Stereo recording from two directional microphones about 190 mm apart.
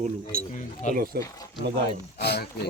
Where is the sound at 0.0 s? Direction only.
50° right (ahead or behind).